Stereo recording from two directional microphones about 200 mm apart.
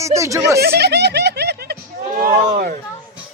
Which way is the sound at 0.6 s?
55° right (ahead or behind).